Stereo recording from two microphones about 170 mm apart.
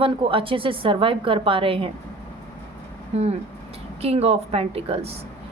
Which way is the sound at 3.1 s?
40° right (ahead or behind).